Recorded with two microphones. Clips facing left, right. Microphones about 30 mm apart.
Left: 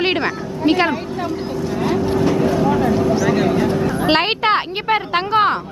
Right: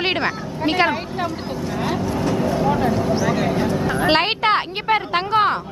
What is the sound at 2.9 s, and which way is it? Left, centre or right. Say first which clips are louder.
A woman's voice: left 3 dB; centre.